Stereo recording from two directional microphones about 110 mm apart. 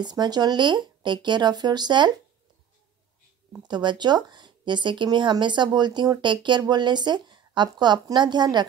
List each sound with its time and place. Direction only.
0.0 s speech: 40° right (ahead or behind)
3.6 s speech: 40° right (ahead or behind)